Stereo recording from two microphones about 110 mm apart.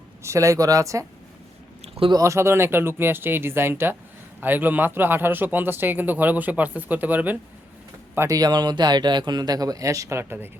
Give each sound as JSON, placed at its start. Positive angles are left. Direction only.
{"t": 0.2, "sound": "speech", "side_deg": -25}
{"t": 2.2, "sound": "speech", "side_deg": -25}
{"t": 8.4, "sound": "speech", "side_deg": -40}